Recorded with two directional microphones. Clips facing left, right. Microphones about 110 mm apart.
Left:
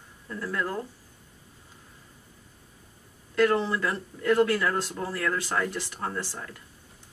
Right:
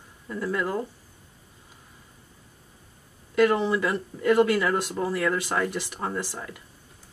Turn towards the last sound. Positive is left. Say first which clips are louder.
# right 3 dB
turn(degrees=-10)  # may be behind; listen again after turning